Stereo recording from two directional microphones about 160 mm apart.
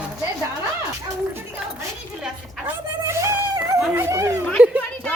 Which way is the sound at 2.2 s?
15° right (ahead or behind).